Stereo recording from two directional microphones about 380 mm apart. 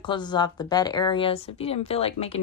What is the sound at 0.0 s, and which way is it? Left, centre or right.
A woman's voice, centre.